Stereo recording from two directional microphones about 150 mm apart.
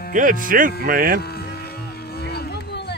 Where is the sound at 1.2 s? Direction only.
90° left.